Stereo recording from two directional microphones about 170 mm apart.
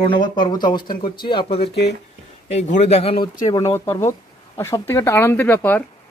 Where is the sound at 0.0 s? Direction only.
25° left (ahead or behind).